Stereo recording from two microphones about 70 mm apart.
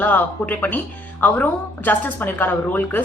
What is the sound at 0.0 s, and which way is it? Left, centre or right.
A woman's voice, left.